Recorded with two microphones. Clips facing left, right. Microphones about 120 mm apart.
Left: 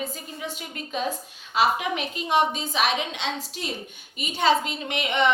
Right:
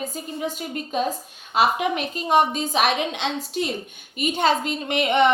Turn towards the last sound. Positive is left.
turn(degrees=-50)  # may be behind; listen again after turning